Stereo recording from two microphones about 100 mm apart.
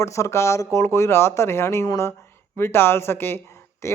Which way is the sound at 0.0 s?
30° left (ahead or behind).